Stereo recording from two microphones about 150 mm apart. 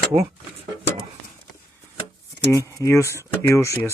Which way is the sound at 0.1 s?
55° right (ahead or behind).